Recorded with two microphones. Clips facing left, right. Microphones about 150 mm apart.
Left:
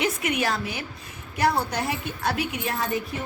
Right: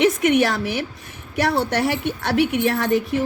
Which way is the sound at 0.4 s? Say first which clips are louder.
Right 5 dB; 75° right (ahead or behind).